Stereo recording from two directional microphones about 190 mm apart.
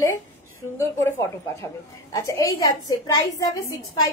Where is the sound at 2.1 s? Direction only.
20° left (ahead or behind).